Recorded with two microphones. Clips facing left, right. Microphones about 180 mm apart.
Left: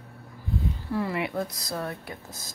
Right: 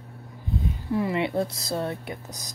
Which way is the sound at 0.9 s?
20° right (ahead or behind).